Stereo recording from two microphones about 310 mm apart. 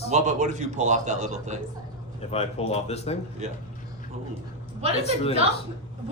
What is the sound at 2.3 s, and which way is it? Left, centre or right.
Speech, centre.